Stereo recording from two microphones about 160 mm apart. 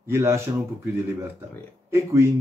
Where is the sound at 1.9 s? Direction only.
15° right (ahead or behind).